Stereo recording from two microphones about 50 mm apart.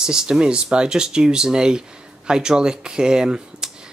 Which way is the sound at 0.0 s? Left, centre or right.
Centre.